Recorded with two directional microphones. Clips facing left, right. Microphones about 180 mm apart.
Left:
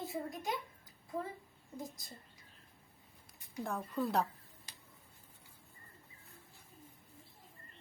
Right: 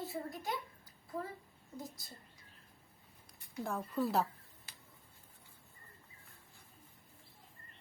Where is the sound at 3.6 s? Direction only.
Centre (ahead or behind).